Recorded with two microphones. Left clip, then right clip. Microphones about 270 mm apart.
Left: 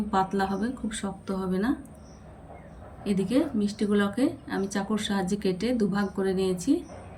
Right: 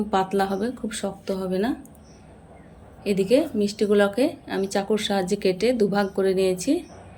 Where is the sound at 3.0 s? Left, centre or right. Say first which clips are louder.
Right 7 dB; centre.